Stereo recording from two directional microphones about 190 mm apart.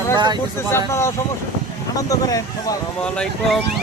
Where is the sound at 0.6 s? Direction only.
15° left (ahead or behind).